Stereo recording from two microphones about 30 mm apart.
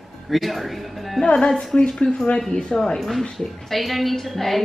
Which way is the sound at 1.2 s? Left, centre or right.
Left.